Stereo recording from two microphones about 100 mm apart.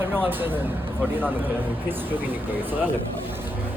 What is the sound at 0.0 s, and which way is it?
Speech, 20° right (ahead or behind).